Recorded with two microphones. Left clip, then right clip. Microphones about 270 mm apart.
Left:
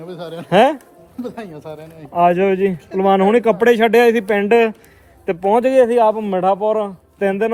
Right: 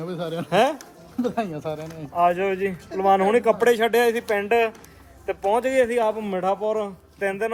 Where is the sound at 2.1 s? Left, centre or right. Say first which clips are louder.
Left 7 dB; left.